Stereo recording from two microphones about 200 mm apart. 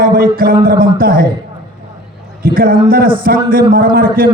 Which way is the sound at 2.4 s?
45° right (ahead or behind).